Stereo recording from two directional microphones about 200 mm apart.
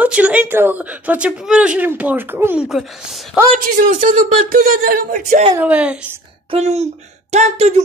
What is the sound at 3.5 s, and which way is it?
Speech, 40° right (ahead or behind).